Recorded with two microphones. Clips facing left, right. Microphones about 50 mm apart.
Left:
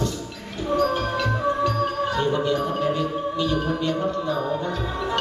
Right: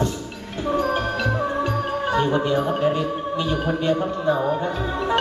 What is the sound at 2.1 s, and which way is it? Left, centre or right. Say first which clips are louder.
Speech: right 6 dB; right.